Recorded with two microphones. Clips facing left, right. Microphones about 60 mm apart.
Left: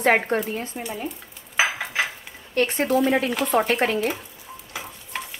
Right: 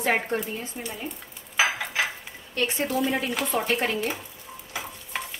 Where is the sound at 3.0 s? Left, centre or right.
Left.